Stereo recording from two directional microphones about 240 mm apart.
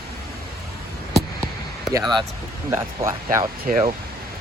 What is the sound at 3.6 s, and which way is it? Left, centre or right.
Speech, right.